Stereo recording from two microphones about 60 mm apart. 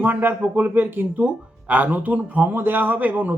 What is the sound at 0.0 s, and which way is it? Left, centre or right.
Speech, right.